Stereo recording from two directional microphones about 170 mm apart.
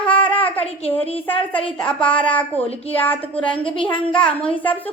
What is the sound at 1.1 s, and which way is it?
Speech, 30° left (ahead or behind).